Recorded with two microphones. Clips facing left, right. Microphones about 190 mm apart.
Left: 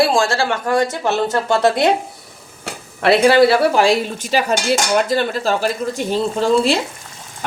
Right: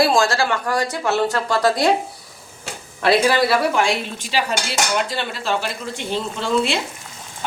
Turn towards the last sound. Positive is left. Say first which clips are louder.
# left 6 dB
turn(degrees=40)  # may be behind; listen again after turning